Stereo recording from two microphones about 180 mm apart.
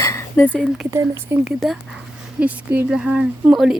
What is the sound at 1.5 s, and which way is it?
A woman's voice, centre (ahead or behind).